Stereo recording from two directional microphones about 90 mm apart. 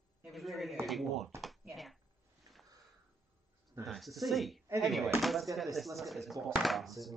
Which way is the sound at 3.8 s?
Centre (ahead or behind).